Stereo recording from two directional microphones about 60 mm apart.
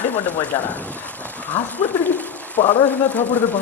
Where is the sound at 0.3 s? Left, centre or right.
Left.